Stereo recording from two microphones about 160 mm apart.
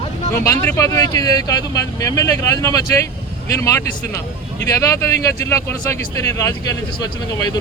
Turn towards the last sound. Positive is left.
turn(degrees=25)  # may be behind; listen again after turning